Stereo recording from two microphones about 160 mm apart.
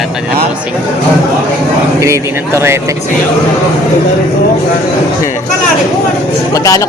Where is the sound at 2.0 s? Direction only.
20° right (ahead or behind).